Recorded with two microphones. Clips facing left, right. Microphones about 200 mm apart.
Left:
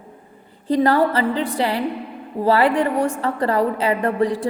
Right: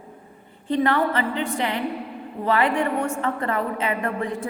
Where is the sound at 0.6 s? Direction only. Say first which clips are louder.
Left 4 dB; 40° left (ahead or behind).